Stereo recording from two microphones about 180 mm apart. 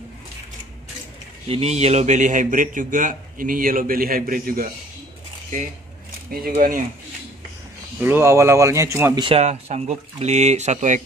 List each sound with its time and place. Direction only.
1.5 s a man's voice: 35° right (ahead or behind); by 4.6 s 55° right (ahead or behind)
6.6 s a man's voice: 55° right (ahead or behind)
8.0 s speech: 10° right (ahead or behind)
9.2 s speech: 35° right (ahead or behind)